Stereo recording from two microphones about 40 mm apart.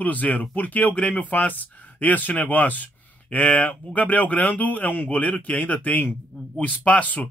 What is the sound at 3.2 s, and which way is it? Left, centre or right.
Speech, left.